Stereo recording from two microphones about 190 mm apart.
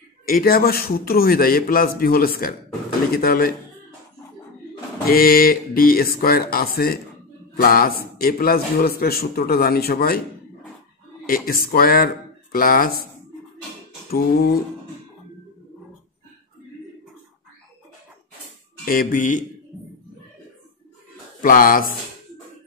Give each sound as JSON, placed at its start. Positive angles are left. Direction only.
{"t": 0.2, "sound": "a man's voice", "side_deg": 50}
{"t": 5.0, "sound": "a man's voice", "side_deg": 50}
{"t": 11.2, "sound": "a man's voice", "side_deg": 50}
{"t": 14.1, "sound": "a man's voice", "side_deg": 55}
{"t": 18.9, "sound": "a man's voice", "side_deg": 45}
{"t": 21.4, "sound": "a man's voice", "side_deg": 45}